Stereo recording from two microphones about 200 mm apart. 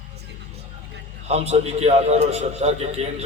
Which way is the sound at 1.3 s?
30° right (ahead or behind).